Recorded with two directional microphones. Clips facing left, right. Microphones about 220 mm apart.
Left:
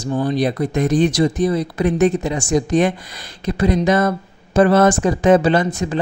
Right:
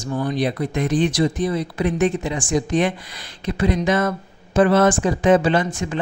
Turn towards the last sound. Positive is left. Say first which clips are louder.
# left 3 dB
turn(degrees=40)  # may be behind; listen again after turning